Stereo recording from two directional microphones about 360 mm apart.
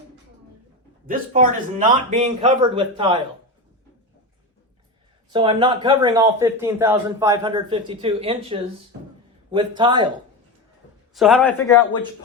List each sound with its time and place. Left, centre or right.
1.0 s speech: right
5.3 s speech: centre
11.1 s a man's voice: centre